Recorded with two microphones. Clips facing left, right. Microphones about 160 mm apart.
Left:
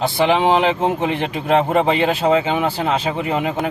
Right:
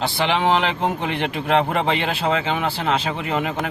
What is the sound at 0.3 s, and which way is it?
A man's voice, 15° left (ahead or behind).